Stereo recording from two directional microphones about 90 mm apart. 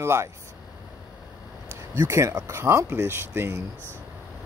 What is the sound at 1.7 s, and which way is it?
Speech, 30° right (ahead or behind).